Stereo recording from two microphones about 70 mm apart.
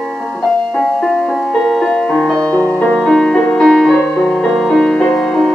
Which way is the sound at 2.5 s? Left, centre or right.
Left.